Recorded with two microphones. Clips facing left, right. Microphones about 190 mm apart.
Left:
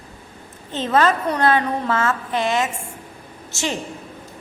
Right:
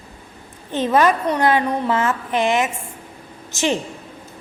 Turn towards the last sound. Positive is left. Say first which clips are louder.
# right 5 dB
turn(degrees=-20)  # may be behind; listen again after turning